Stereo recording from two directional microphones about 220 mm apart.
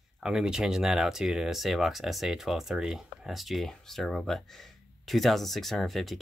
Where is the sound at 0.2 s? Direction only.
5° right (ahead or behind).